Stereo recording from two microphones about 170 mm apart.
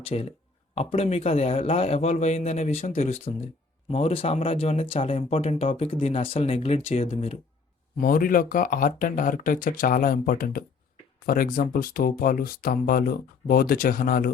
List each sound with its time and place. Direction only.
0.0 s a man's voice: 35° left (ahead or behind)
7.9 s speech: 55° left (ahead or behind)